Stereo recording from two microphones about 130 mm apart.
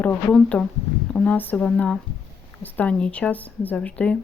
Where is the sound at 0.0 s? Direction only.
10° left (ahead or behind).